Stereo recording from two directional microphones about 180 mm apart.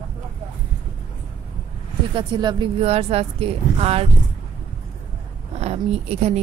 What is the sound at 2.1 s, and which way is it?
Speech, 25° right (ahead or behind).